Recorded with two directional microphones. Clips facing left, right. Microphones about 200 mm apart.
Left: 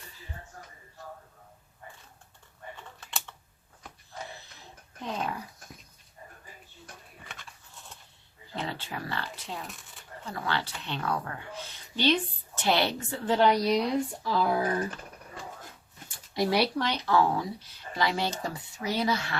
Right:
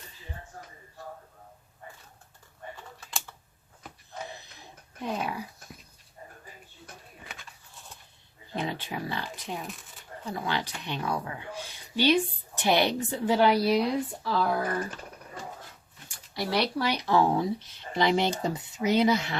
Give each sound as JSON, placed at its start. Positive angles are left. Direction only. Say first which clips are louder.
{"t": 4.4, "sound": "wheeze", "louder": "right 1 dB", "side_deg": -15}
{"t": 8.5, "sound": "speech", "louder": "right 3 dB", "side_deg": -15}
{"t": 16.3, "sound": "speech", "louder": "left 4 dB", "side_deg": 20}
{"t": 16.7, "sound": "speech", "louder": "right 1 dB", "side_deg": -10}